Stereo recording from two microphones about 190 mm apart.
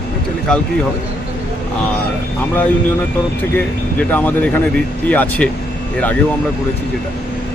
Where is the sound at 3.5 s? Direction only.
10° left (ahead or behind).